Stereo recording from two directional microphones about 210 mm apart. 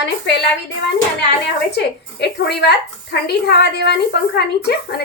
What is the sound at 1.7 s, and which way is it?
A woman's voice, 50° left (ahead or behind).